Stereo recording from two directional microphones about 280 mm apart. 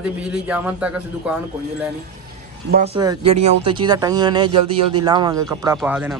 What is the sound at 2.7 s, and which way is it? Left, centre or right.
A man's voice, right.